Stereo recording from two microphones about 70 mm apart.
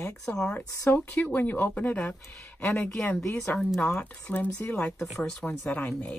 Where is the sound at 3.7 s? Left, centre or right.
Left.